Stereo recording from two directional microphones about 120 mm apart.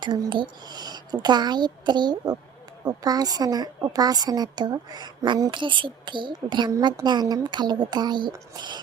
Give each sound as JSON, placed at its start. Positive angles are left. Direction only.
{"t": 0.0, "sound": "a woman's voice", "side_deg": -40}
{"t": 6.7, "sound": "a woman's voice", "side_deg": -30}